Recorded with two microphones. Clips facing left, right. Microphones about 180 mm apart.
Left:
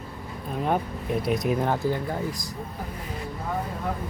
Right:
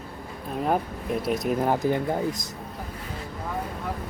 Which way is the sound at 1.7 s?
20° right (ahead or behind).